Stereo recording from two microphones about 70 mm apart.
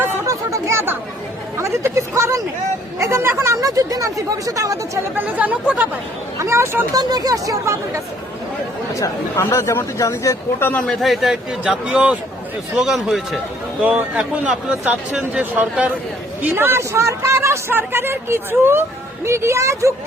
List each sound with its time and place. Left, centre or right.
0.3 s chatter: right
1.5 s a sound: right
3.0 s speech: right
5.1 s speech: right
6.4 s speech: right
6.9 s speech: right
9.0 s speech: left
10.8 s a man's voice: centre
13.8 s a man's voice: centre
16.6 s speech: right